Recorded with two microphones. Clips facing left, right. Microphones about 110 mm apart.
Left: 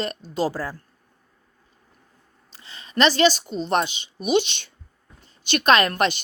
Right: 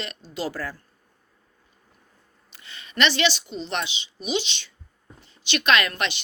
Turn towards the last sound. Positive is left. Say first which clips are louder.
# left 4 dB
turn(degrees=45)  # may be behind; listen again after turning